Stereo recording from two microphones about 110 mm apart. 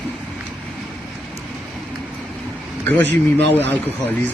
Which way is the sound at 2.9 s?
15° left (ahead or behind).